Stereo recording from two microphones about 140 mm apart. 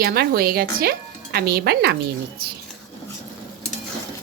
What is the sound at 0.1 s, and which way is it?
Speech, 90° right.